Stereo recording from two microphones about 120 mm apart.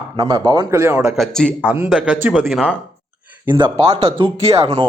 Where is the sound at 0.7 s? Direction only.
25° right (ahead or behind).